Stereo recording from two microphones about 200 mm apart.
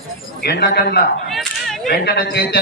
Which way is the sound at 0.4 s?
50° left (ahead or behind).